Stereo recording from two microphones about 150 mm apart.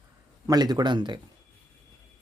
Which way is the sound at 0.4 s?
25° right (ahead or behind).